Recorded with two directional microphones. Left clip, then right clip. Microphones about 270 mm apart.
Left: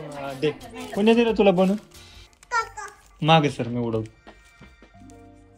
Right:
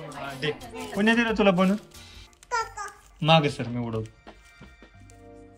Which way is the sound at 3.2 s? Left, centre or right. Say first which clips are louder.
Left 2 dB; left.